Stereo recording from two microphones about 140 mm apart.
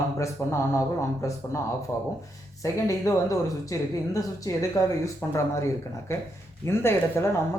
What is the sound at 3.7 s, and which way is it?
Speech, 25° left (ahead or behind).